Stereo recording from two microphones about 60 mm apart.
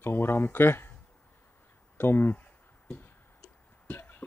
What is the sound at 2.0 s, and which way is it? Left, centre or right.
Speech, left.